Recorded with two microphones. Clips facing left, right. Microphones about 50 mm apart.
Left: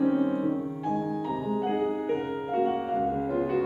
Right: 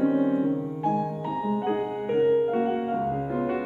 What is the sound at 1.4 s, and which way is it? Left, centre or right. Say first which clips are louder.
Music: right 1 dB; centre.